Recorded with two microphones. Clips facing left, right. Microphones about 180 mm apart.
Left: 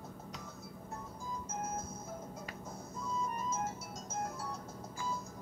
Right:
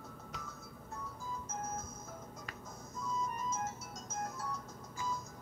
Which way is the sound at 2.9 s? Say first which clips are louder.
Even; 30° left (ahead or behind).